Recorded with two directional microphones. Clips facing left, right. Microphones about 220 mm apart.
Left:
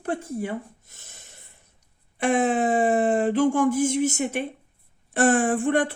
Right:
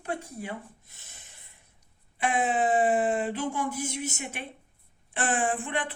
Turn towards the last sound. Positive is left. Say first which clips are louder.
# left 8 dB
turn(degrees=45)  # may be behind; listen again after turning